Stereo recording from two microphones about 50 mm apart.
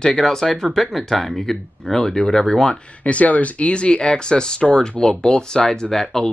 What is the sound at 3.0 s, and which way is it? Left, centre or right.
Speech, left.